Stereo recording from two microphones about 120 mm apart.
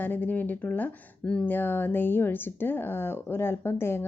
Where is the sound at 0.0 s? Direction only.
15° left (ahead or behind).